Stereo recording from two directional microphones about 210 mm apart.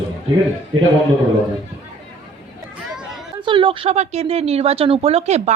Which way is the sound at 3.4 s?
25° right (ahead or behind).